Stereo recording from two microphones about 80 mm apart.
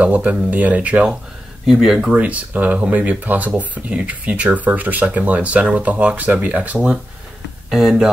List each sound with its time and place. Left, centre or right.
0.0 s speech: centre
1.7 s speech: centre
2.1 s speech: centre
7.7 s speech: centre